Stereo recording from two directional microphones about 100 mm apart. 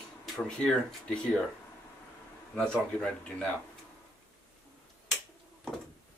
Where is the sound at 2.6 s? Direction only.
10° left (ahead or behind).